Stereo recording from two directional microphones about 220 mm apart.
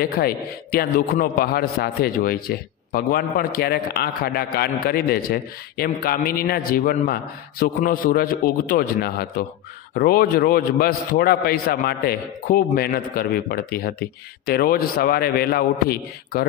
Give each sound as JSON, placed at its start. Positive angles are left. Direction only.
{"t": 0.2, "sound": "a man's voice", "side_deg": 45}